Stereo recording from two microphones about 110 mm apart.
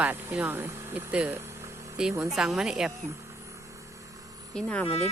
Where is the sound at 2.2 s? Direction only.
5° right (ahead or behind).